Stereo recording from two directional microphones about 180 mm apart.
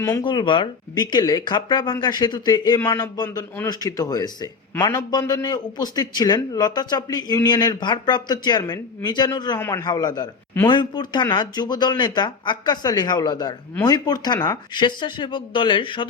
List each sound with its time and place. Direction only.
0.0 s speech: 15° left (ahead or behind)
0.3 s a man's voice: 25° left (ahead or behind)